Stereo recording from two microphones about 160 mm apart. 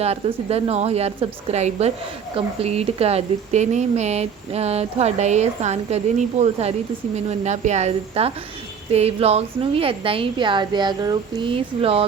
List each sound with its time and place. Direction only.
0.0 s a woman's voice: 40° right (ahead or behind)